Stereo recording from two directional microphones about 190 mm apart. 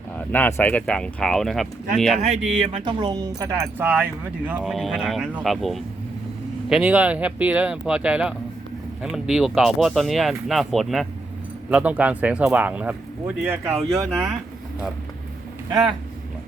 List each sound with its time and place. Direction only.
0.3 s speech: 10° left (ahead or behind)
2.6 s speech: 25° right (ahead or behind); by 4.5 s 10° right (ahead or behind)
4.6 s speech: centre (ahead or behind); by 14.3 s 15° right (ahead or behind)
15.7 s speech: 20° right (ahead or behind)